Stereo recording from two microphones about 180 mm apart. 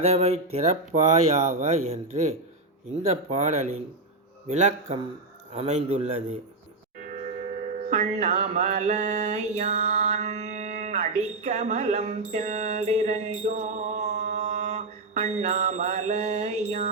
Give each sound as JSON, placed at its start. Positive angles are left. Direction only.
{"t": 0.0, "sound": "speech", "side_deg": -35}
{"t": 7.8, "sound": "mantra", "side_deg": -40}